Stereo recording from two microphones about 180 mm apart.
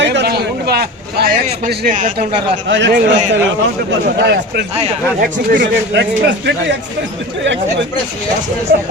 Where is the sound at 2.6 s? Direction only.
80° right.